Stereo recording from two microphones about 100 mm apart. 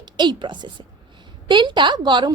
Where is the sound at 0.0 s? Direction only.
50° right (ahead or behind).